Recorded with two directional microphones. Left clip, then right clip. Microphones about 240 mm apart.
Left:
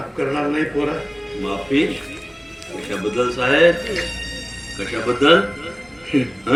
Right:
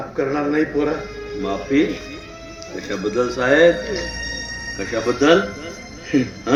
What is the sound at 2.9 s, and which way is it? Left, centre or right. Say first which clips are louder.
Speech: even; right.